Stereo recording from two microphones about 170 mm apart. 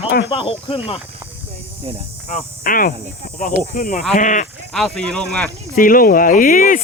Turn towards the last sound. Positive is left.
turn(degrees=50)  # may be behind; listen again after turning